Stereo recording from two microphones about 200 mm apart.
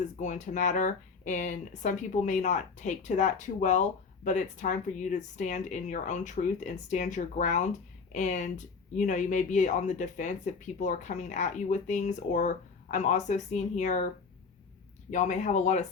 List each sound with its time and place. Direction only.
0.2 s speech: 40° left (ahead or behind)
15.1 s speech: 35° left (ahead or behind)